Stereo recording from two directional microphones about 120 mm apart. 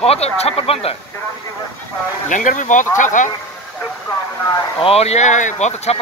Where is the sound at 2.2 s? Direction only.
90° left.